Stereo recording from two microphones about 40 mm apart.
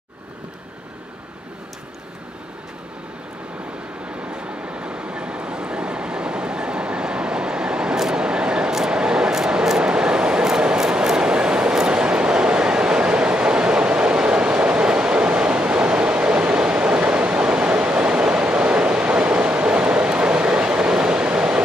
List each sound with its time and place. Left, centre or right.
4.3 s vehicle: right